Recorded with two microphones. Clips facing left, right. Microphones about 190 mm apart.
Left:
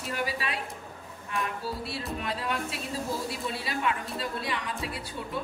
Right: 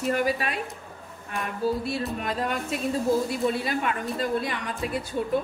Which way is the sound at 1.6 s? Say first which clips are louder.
Right 8 dB; 45° right (ahead or behind).